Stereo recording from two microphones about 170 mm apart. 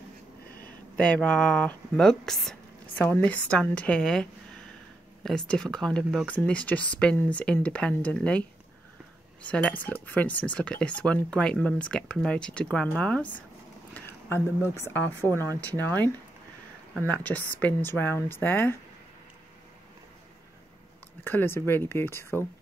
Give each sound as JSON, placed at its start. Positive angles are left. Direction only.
{"t": 0.9, "sound": "speech", "side_deg": 5}
{"t": 13.9, "sound": "a sound", "side_deg": 15}
{"t": 14.7, "sound": "speech", "side_deg": 15}
{"t": 17.1, "sound": "speech", "side_deg": 10}
{"t": 21.2, "sound": "speech", "side_deg": 10}